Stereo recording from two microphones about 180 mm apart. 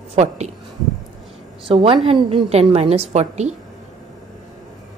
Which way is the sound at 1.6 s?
25° right (ahead or behind).